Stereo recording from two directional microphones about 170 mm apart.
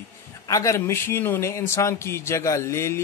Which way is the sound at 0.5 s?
20° left (ahead or behind).